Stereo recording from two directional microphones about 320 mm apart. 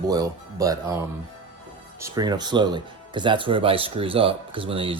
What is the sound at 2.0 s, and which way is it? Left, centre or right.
Speech, centre.